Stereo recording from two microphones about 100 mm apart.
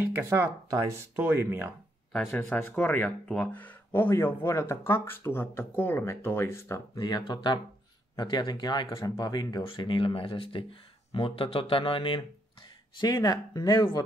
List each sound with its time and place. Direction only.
0.0 s speech: 25° right (ahead or behind)
1.1 s speech: 20° right (ahead or behind)
2.1 s speech: 15° left (ahead or behind)
7.0 s speech: 45° left (ahead or behind)
13.0 s speech: 40° left (ahead or behind)